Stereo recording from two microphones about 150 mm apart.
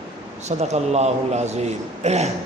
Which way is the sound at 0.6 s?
45° right (ahead or behind).